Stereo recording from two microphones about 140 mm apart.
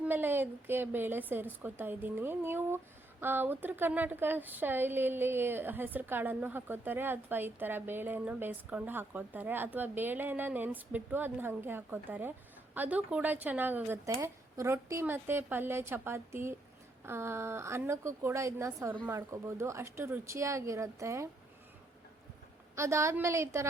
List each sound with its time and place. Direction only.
0.0 s a woman's voice: 15° right (ahead or behind)
22.7 s speech: 20° right (ahead or behind)